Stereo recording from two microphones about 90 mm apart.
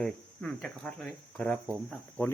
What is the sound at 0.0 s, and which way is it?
Speech, 5° left (ahead or behind).